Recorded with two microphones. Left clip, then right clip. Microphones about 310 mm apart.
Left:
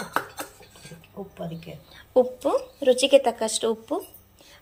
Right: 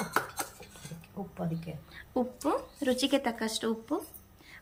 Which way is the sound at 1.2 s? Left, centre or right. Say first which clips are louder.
Left 4 dB; right.